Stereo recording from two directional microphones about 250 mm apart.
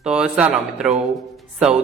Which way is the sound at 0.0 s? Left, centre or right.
Centre.